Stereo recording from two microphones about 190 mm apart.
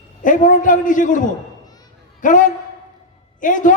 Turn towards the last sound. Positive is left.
turn(degrees=45)  # may be behind; listen again after turning